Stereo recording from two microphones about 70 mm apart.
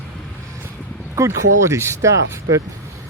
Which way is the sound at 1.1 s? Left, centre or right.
Right.